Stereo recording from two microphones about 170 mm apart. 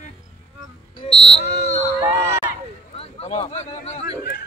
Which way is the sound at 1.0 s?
35° left (ahead or behind).